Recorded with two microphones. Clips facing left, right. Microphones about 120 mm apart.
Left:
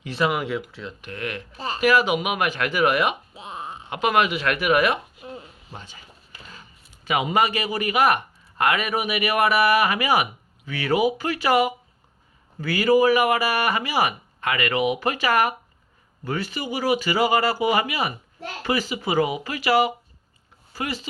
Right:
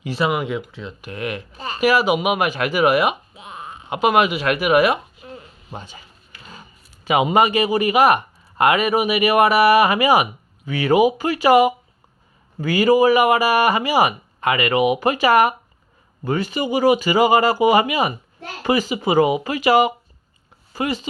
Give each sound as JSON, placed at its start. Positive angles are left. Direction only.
{"t": 0.0, "sound": "speech", "side_deg": -5}
{"t": 1.1, "sound": "speech", "side_deg": -15}
{"t": 1.5, "sound": "speech", "side_deg": 30}
{"t": 1.8, "sound": "speech", "side_deg": -10}
{"t": 3.3, "sound": "a sound", "side_deg": 30}
{"t": 3.8, "sound": "speech", "side_deg": -15}
{"t": 5.2, "sound": "a sound", "side_deg": 15}
{"t": 5.7, "sound": "speech", "side_deg": -15}